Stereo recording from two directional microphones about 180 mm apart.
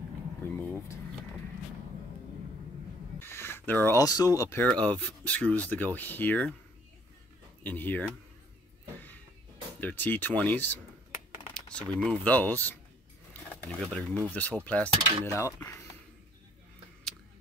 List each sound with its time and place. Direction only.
0.4 s speech: 10° left (ahead or behind)
3.2 s speech: 15° left (ahead or behind)
7.6 s speech: 10° left (ahead or behind)
9.8 s speech: 10° left (ahead or behind)
13.3 s a sound: 5° left (ahead or behind)
14.3 s speech: 10° left (ahead or behind)